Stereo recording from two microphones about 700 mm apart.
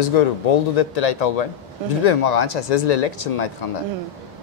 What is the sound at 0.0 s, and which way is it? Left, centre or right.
A man's voice, left.